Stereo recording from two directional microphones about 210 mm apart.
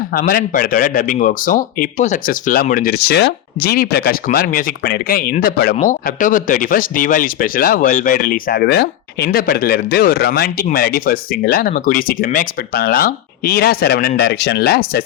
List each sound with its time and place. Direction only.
0.1 s speech: 45° left (ahead or behind)